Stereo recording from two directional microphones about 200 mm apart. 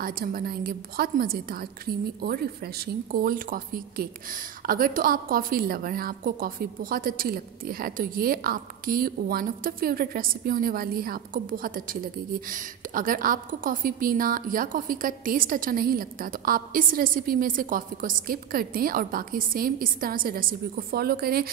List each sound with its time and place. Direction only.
0.0 s a woman's voice: 45° right (ahead or behind)